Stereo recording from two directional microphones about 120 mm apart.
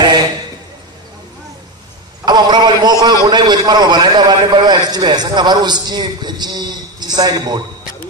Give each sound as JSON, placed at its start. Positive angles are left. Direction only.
{"t": 2.2, "sound": "a man's voice", "side_deg": -35}